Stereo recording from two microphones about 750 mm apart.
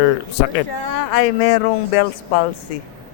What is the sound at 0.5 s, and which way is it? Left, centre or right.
Speech, left.